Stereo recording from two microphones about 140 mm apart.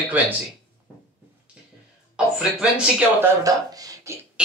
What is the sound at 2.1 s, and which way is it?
Speech, 5° right (ahead or behind).